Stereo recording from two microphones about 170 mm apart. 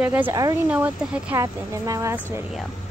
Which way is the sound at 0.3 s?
20° right (ahead or behind).